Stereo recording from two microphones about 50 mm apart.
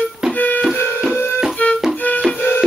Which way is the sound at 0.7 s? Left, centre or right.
Left.